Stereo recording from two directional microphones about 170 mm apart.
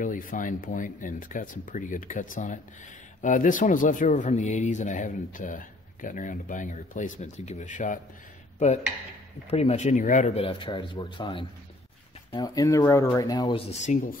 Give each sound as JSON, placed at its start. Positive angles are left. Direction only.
{"t": 0.0, "sound": "speech", "side_deg": 50}
{"t": 9.5, "sound": "speech", "side_deg": 40}
{"t": 13.7, "sound": "speech", "side_deg": 45}